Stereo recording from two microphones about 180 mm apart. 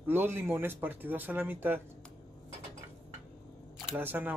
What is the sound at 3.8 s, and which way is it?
Speech, 10° right (ahead or behind).